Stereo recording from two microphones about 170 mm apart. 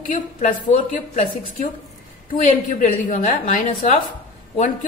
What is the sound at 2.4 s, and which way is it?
A woman's voice, 55° left (ahead or behind).